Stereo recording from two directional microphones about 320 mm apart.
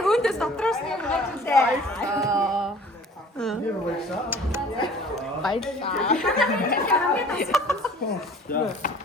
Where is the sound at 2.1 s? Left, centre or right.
Centre.